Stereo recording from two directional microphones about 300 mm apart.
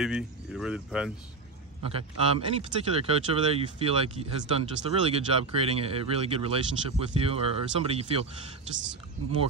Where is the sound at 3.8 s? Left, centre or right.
Centre.